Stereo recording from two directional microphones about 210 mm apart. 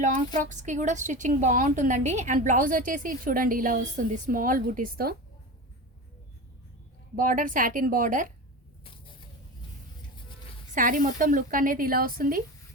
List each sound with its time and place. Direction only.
0.0 s a woman's voice: 35° right (ahead or behind)
7.2 s a woman's voice: 40° right (ahead or behind)
10.8 s a woman's voice: 40° right (ahead or behind)